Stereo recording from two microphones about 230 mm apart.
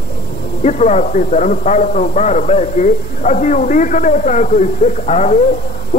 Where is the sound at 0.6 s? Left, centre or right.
Left.